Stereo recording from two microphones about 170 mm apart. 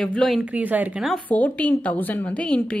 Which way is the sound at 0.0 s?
5° left (ahead or behind).